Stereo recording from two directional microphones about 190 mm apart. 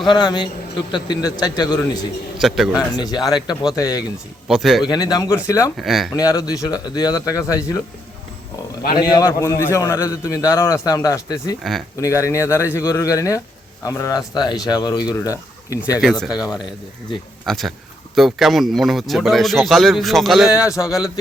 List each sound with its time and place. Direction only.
0.1 s a man's voice: 25° left (ahead or behind)
2.4 s a man's voice: centre (ahead or behind)
2.7 s a man's voice: 20° left (ahead or behind)
4.4 s a man's voice: centre (ahead or behind)
4.8 s a man's voice: 20° left (ahead or behind)
5.7 s a man's voice: centre (ahead or behind)
6.1 s a man's voice: 20° left (ahead or behind)
9.0 s a man's voice: 20° left (ahead or behind)
17.4 s a man's voice: centre (ahead or behind)
20.7 s a man's voice: 15° left (ahead or behind)